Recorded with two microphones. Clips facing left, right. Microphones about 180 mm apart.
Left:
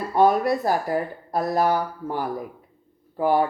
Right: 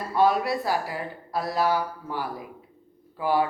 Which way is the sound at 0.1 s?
50° left (ahead or behind).